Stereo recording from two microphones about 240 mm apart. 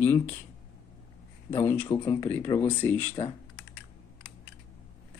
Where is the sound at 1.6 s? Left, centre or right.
Centre.